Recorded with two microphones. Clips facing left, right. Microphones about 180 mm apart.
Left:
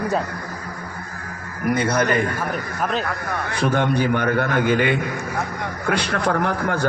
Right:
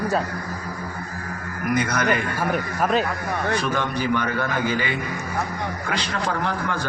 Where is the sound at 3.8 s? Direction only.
55° left (ahead or behind).